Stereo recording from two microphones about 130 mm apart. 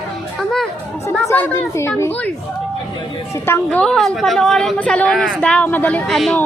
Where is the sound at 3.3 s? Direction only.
20° left (ahead or behind).